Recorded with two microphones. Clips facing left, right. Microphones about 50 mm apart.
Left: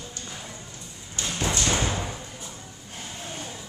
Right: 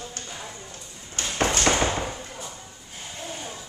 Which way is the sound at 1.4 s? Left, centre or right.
Right.